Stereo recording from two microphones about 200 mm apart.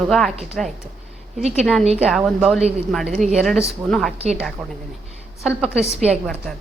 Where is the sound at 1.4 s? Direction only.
35° right (ahead or behind).